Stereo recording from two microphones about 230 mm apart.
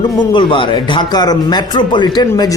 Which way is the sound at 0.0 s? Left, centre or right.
Centre.